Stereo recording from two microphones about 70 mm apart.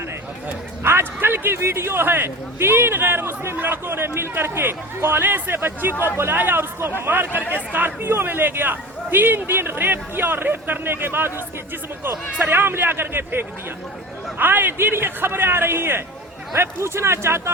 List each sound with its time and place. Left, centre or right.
0.8 s a man's voice: right